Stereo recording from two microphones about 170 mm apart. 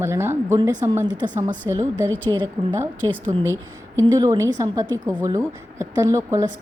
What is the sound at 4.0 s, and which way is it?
Speech, 20° right (ahead or behind).